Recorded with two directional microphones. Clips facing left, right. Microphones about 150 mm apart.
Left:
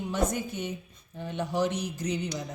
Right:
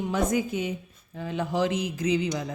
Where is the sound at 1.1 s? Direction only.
90° right.